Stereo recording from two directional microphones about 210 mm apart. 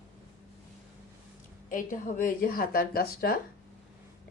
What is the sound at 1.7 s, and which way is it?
Speech, 40° left (ahead or behind).